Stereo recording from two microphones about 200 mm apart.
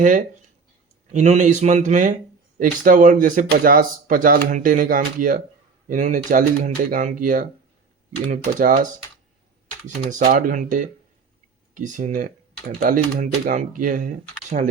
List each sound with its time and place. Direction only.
0.0 s speech: 40° right (ahead or behind)